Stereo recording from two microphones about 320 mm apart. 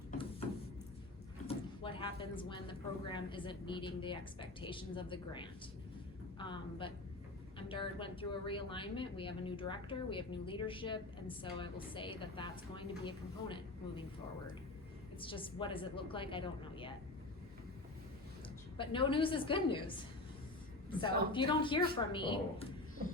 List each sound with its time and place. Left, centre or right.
1.5 s a woman's voice: centre
15.2 s speech: centre
18.8 s speech: centre